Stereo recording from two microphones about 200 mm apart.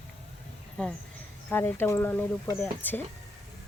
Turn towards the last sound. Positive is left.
turn(degrees=10)  # may be behind; listen again after turning